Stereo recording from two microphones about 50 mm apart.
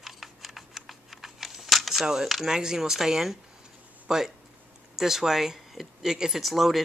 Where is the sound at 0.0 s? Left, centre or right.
Centre.